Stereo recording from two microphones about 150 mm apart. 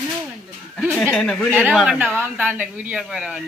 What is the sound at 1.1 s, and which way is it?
Speech, 5° left (ahead or behind).